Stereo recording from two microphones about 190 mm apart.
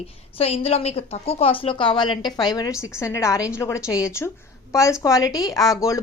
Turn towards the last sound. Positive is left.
turn(degrees=15)  # may be behind; listen again after turning